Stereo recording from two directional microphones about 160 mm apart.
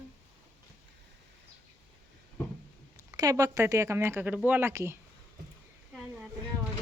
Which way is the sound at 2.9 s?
20° right (ahead or behind).